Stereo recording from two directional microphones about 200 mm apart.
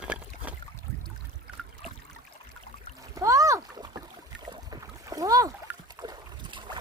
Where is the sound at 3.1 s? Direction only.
15° right (ahead or behind).